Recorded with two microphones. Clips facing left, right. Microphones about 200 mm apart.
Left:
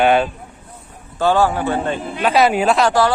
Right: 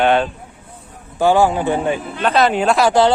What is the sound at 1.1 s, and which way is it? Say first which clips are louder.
Speech: right 2 dB; 15° right (ahead or behind).